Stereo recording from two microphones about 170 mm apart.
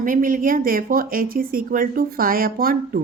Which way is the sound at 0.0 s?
50° right (ahead or behind).